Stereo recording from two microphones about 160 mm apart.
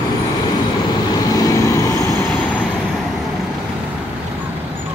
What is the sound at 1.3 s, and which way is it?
Vehicle, 25° left (ahead or behind).